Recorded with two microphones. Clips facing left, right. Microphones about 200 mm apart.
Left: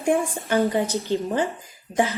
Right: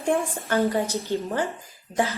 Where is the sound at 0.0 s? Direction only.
15° left (ahead or behind).